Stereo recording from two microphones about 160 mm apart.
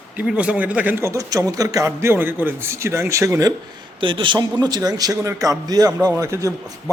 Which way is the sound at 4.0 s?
30° right (ahead or behind).